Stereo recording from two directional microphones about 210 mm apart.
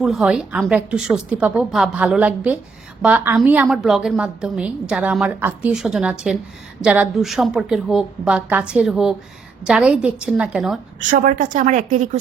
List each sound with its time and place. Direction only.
0.0 s a woman's voice: centre (ahead or behind)
11.1 s speech: 40° right (ahead or behind)